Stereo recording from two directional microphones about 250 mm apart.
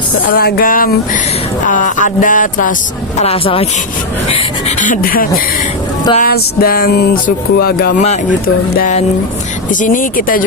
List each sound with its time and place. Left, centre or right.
0.3 s music: left
3.2 s speech: left
4.3 s music: left